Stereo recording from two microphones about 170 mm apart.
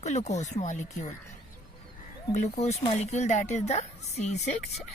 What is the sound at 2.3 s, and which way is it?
Speech, 40° left (ahead or behind).